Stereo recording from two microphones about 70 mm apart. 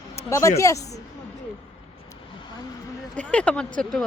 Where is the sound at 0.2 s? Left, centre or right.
Left.